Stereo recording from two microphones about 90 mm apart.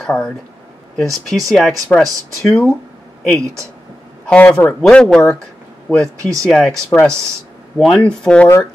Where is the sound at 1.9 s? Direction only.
20° left (ahead or behind).